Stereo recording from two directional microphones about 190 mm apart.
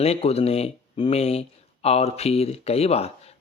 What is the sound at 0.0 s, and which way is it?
Speech, 35° left (ahead or behind).